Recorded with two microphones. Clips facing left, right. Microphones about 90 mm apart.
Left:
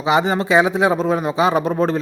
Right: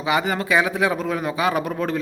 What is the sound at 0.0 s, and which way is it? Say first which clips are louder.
A man's voice: left 5 dB; 25° left (ahead or behind).